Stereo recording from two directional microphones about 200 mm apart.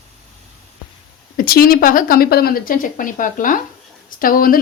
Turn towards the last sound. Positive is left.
turn(degrees=45)  # may be behind; listen again after turning